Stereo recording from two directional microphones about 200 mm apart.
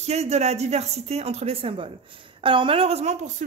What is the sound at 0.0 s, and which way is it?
Speech, 35° right (ahead or behind).